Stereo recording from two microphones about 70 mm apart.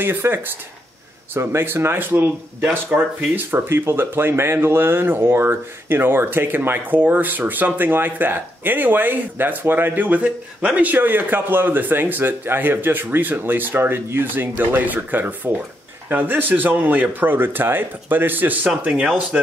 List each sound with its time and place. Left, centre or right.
0.0 s speech: right
3.5 s speech: right